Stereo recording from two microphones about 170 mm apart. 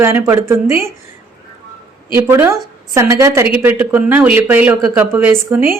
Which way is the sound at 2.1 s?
15° right (ahead or behind).